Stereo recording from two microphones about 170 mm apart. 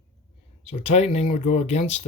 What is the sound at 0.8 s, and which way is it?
Speech, 40° left (ahead or behind).